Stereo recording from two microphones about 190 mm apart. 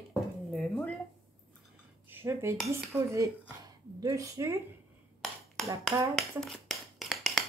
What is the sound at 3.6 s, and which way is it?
Speech, 20° right (ahead or behind).